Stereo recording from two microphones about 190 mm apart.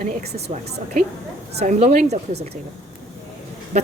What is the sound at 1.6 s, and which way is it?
Speech, 35° right (ahead or behind).